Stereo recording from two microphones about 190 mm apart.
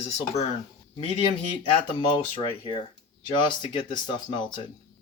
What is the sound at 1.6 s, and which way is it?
Speech, 30° left (ahead or behind).